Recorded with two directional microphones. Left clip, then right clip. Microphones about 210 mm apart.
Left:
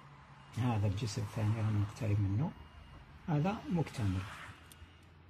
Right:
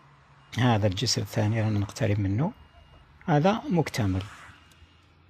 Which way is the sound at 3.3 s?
30° right (ahead or behind).